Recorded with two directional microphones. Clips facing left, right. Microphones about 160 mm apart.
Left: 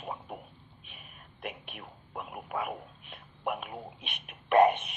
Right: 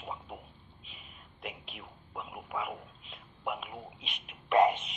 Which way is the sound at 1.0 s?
55° left (ahead or behind).